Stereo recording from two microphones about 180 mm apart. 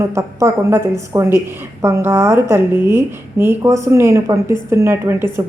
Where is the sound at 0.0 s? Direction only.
15° right (ahead or behind).